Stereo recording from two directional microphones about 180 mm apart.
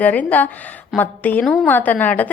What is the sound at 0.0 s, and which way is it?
A woman's voice, 10° left (ahead or behind).